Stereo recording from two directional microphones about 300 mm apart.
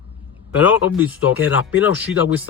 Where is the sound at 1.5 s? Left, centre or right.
Left.